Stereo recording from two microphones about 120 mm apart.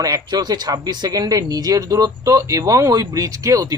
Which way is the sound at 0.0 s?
30° right (ahead or behind).